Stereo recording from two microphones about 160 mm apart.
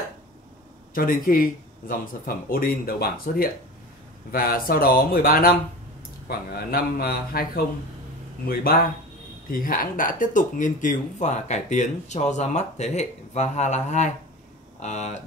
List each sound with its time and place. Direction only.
0.9 s a man's voice: 60° left (ahead or behind)